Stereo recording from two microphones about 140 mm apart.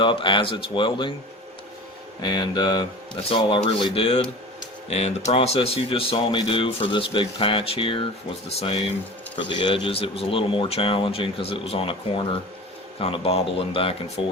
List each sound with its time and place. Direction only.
0.0 s speech: 35° left (ahead or behind)
2.2 s speech: 30° left (ahead or behind)